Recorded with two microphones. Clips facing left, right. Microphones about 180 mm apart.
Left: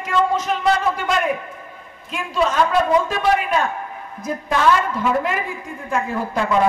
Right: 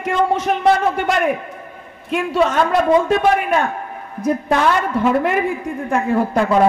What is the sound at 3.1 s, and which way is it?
Speech, 55° right (ahead or behind).